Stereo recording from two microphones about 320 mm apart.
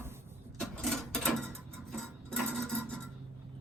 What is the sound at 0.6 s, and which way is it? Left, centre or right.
Sewing machine, centre.